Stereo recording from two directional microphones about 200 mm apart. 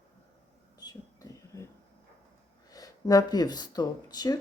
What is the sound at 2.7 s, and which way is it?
Speech, 20° left (ahead or behind).